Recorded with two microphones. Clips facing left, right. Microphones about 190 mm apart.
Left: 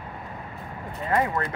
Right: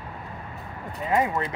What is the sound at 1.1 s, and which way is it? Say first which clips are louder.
Speech: right 1 dB; 20° right (ahead or behind).